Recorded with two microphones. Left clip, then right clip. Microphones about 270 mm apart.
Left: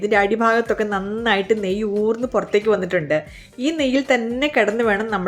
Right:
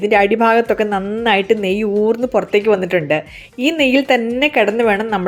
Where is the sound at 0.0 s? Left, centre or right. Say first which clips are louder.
Right 4 dB; centre.